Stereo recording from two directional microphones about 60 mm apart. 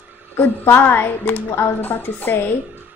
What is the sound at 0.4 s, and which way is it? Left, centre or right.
A woman's voice, left.